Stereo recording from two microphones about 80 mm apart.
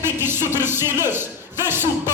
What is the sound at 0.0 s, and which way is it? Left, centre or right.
A man's voice, right.